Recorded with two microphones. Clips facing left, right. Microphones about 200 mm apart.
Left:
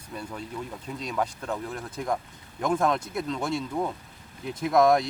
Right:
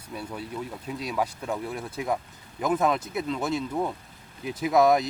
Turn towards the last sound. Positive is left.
turn(degrees=-5)  # may be behind; listen again after turning